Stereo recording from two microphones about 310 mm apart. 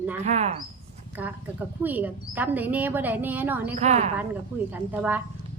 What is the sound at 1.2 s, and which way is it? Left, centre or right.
Speech, centre.